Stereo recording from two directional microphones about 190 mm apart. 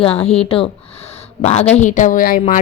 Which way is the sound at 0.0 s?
30° left (ahead or behind).